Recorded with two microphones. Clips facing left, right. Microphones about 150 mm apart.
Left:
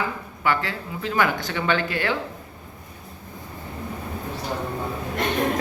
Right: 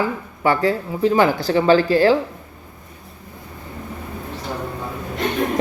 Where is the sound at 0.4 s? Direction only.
35° right (ahead or behind).